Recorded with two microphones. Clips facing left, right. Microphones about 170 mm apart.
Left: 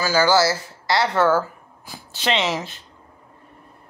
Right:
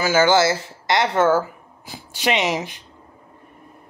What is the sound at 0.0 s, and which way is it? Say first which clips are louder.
Speech: right 1 dB; 20° right (ahead or behind).